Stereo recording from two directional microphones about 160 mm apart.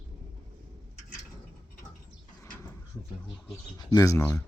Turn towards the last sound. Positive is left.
turn(degrees=20)  # may be behind; listen again after turning